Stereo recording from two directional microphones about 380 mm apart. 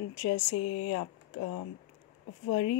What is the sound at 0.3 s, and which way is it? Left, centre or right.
Speech, left.